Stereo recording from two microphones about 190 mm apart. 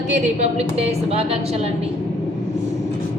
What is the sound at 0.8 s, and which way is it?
Speech, 30° right (ahead or behind).